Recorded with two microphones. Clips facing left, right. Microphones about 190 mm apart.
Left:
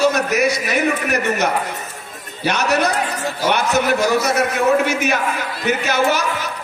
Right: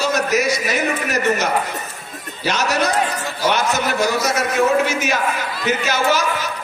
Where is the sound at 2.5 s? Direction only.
60° left (ahead or behind).